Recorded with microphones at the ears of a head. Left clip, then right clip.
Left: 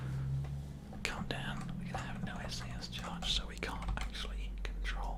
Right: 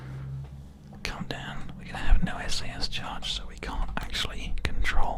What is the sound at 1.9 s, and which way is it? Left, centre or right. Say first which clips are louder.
Whispering: right 10 dB; right.